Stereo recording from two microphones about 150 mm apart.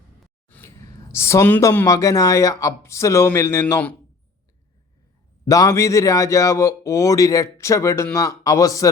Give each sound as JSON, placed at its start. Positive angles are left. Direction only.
{"t": 0.4, "sound": "speech", "side_deg": 15}
{"t": 5.5, "sound": "a man's voice", "side_deg": 20}